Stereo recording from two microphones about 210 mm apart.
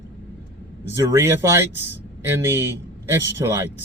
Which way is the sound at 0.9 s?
10° right (ahead or behind).